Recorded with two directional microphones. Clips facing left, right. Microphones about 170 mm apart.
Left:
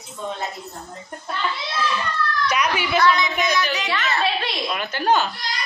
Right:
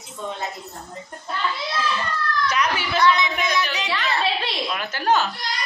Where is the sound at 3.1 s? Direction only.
25° right (ahead or behind).